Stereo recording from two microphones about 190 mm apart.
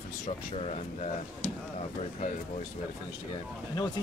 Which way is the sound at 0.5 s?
35° left (ahead or behind).